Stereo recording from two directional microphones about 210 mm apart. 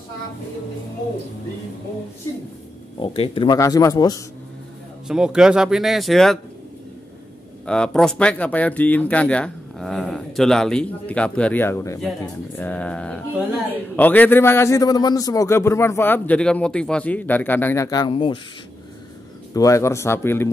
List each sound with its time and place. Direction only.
3.0 s speech: 25° left (ahead or behind)
5.0 s speech: 5° right (ahead or behind)
7.6 s a man's voice: 5° left (ahead or behind); by 18.4 s 25° left (ahead or behind)
19.5 s a man's voice: 15° left (ahead or behind)